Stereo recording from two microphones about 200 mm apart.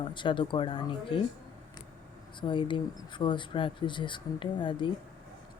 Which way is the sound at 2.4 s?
25° left (ahead or behind).